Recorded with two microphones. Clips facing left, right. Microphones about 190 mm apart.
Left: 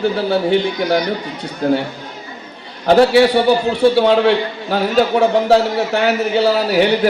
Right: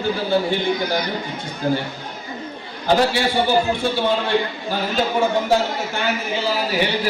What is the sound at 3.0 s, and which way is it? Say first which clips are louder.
A man's voice: left 8 dB; 65° left (ahead or behind).